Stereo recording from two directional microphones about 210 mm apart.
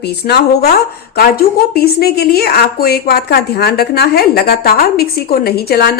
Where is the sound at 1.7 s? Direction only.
50° left (ahead or behind).